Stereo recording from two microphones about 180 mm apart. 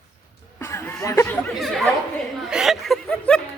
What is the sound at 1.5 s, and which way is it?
Speech, centre (ahead or behind).